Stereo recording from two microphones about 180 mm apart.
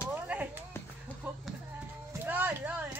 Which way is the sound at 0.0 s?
10° right (ahead or behind).